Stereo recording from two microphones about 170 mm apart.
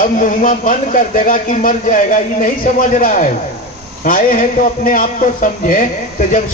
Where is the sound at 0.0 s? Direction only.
50° left (ahead or behind).